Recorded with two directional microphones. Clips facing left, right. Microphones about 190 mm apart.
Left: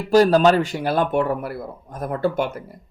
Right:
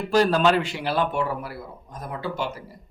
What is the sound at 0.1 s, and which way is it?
Speech, 40° left (ahead or behind).